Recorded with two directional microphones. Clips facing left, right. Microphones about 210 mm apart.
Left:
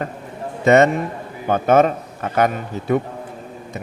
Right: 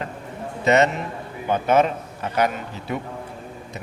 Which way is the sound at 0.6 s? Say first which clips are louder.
Left 5 dB; 50° left (ahead or behind).